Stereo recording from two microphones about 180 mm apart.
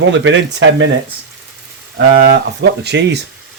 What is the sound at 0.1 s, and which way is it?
Speech, 90° right.